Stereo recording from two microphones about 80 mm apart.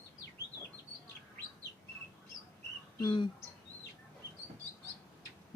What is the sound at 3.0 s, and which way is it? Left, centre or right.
Speech, left.